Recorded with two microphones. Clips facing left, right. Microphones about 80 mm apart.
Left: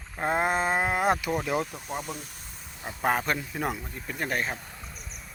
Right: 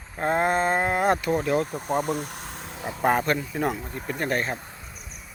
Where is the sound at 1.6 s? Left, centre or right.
Right.